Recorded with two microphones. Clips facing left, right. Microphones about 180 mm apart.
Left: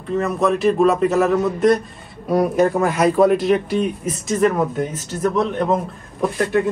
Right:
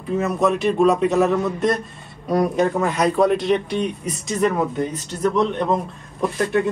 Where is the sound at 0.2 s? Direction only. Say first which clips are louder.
Left 2 dB; centre (ahead or behind).